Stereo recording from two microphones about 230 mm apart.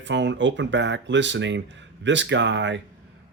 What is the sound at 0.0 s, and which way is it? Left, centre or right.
Speech, right.